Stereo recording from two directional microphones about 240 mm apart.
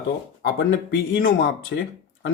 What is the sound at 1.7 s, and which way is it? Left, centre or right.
Speech, left.